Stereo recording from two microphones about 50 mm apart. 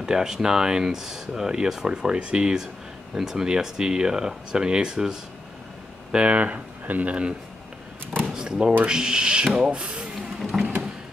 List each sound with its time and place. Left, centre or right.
0.0 s speech: centre
6.1 s speech: right
8.3 s drawer open or close: centre
8.8 s speech: centre
9.7 s a sound: right
10.4 s a sound: centre